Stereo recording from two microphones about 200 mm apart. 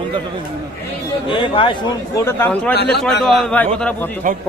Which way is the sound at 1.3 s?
25° left (ahead or behind).